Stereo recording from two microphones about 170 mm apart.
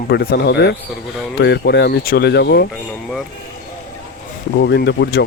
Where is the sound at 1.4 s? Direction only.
90° left; by 2.7 s 75° left (ahead or behind).